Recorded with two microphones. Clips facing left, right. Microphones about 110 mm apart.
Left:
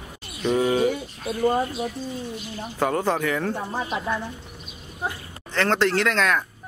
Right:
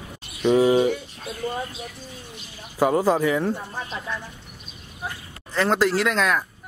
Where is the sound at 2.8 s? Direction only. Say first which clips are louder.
Right 4 dB; 10° right (ahead or behind).